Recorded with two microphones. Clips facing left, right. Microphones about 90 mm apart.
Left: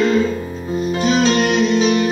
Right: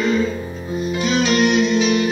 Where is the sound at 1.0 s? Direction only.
30° left (ahead or behind).